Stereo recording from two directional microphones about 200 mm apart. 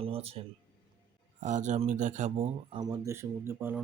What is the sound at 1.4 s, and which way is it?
Speech, 35° right (ahead or behind).